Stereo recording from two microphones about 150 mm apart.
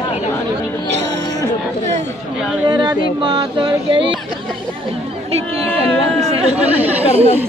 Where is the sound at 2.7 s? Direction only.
30° right (ahead or behind).